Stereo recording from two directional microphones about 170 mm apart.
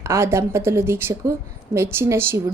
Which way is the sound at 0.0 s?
15° right (ahead or behind).